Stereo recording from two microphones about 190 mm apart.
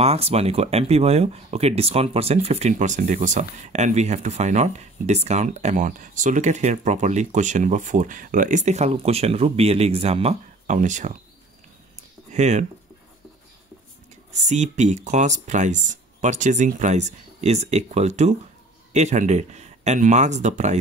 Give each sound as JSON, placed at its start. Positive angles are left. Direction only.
{"t": 0.0, "sound": "speech", "side_deg": -30}
{"t": 12.3, "sound": "speech", "side_deg": -40}
{"t": 14.3, "sound": "speech", "side_deg": -40}